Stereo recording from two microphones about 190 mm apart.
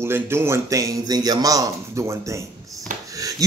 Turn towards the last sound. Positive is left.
turn(degrees=-20)  # may be behind; listen again after turning